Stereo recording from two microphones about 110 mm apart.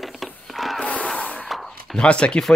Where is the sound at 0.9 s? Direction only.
10° left (ahead or behind).